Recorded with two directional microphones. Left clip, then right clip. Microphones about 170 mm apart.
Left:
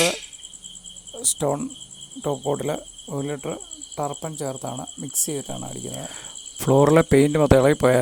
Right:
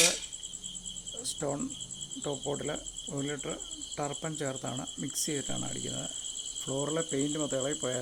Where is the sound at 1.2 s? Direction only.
40° left (ahead or behind).